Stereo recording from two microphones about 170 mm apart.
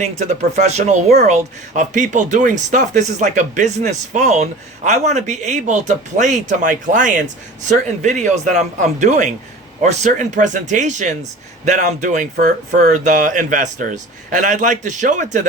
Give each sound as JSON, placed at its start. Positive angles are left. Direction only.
{"t": 0.0, "sound": "speech", "side_deg": -45}